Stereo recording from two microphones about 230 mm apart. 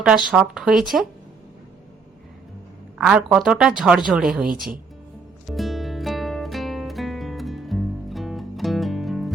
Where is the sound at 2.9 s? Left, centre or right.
Centre.